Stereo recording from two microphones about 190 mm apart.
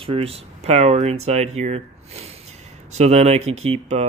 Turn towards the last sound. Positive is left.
turn(degrees=-35)  # may be behind; listen again after turning